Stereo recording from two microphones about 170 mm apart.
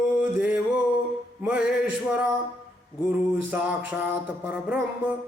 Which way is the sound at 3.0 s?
10° right (ahead or behind).